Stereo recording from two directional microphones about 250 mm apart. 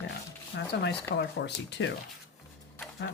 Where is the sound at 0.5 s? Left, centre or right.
Left.